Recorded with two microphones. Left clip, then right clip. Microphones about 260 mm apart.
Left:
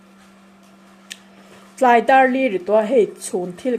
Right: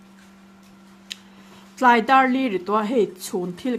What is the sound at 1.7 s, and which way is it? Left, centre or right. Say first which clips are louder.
Speech: left 3 dB; centre.